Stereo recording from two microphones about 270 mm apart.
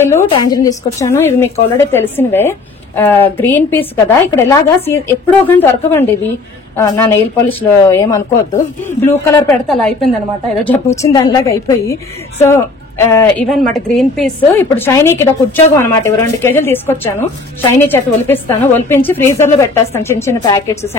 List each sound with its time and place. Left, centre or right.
0.0 s speech: centre
7.4 s a woman's voice: centre